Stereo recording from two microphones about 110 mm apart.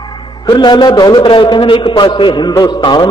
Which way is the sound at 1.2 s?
50° left (ahead or behind).